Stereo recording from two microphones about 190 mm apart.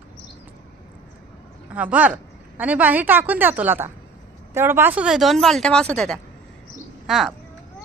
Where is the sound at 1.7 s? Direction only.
10° right (ahead or behind).